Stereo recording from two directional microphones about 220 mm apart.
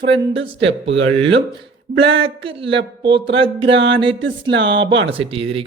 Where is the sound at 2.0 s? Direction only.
25° right (ahead or behind).